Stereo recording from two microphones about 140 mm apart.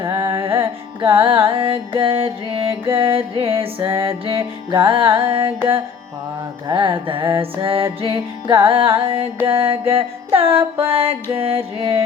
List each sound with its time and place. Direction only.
0.0 s carnatic music: 30° right (ahead or behind)
6.7 s carnatic music: 35° right (ahead or behind)